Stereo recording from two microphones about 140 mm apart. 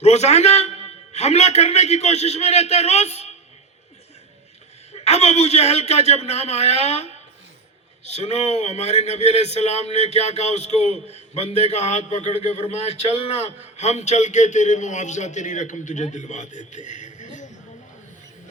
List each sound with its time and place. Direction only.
0.0 s a man's voice: 50° left (ahead or behind)
4.9 s a man's voice: 50° left (ahead or behind)
8.1 s a man's voice: 50° left (ahead or behind)